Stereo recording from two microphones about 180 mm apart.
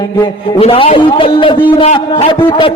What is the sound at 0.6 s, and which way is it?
A man's voice, 30° left (ahead or behind).